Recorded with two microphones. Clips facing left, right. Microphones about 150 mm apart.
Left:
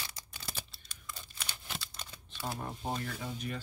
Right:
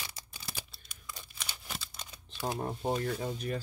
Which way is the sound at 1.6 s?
5° right (ahead or behind).